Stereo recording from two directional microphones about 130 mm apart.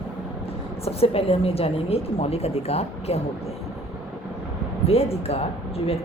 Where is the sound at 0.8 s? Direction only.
50° left (ahead or behind).